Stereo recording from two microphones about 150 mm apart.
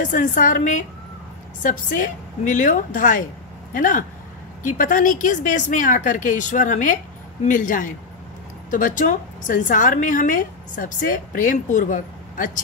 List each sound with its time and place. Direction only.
0.0 s a woman's voice: 60° left (ahead or behind)